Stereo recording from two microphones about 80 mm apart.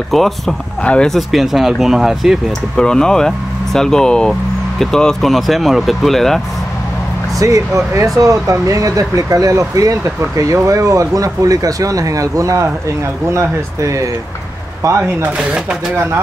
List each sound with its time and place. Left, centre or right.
0.1 s speech: centre
2.7 s speech: centre
7.3 s speech: right
15.2 s speech: centre